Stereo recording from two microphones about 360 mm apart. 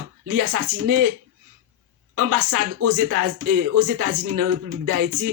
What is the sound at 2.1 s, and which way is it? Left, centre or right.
Speech, right.